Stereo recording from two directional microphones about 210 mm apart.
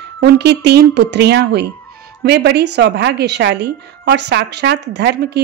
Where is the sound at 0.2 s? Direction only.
50° right (ahead or behind).